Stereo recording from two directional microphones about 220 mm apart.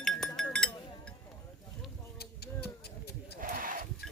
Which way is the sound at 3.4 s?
40° right (ahead or behind).